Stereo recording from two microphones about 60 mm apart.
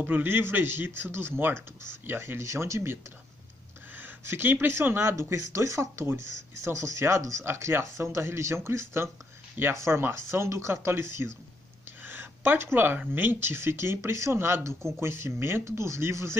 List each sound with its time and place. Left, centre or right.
0.0 s speech: right
12.0 s a sound: right
12.7 s speech: right